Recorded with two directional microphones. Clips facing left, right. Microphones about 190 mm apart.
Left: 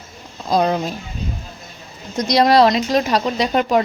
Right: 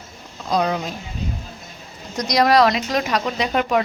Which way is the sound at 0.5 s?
30° left (ahead or behind).